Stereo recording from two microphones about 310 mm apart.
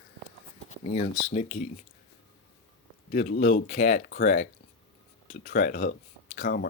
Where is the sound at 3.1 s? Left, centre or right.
Left.